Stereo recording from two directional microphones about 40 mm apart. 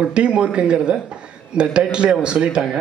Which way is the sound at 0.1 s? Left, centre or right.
Right.